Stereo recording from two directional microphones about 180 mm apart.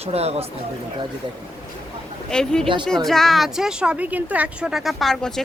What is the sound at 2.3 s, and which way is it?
A woman's voice, 5° left (ahead or behind).